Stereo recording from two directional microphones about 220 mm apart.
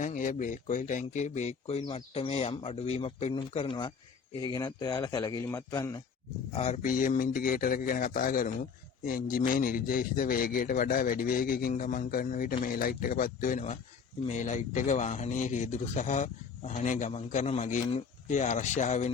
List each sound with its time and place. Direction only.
0.0 s a man's voice: 35° left (ahead or behind); by 6.0 s 15° left (ahead or behind)
6.5 s a man's voice: 30° left (ahead or behind)